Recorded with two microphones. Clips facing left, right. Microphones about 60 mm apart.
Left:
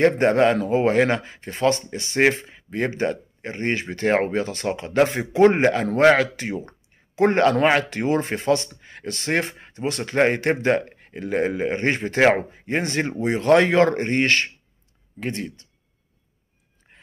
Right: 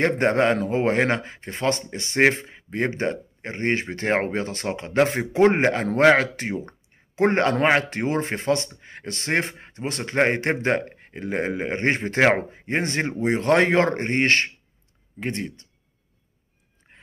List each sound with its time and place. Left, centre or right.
0.0 s a man's voice: right
12.2 s speech: centre
12.6 s speech: right